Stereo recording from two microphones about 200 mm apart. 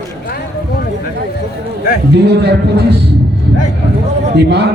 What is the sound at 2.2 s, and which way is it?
Speech, 55° right (ahead or behind).